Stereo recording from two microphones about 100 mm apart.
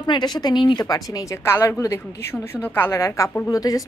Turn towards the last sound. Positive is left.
turn(degrees=35)  # may be behind; listen again after turning